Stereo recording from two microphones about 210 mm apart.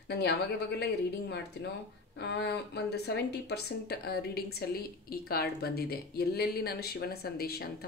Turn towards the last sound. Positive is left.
turn(degrees=50)  # may be behind; listen again after turning